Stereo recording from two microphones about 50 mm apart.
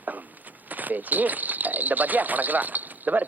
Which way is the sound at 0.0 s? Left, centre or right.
Right.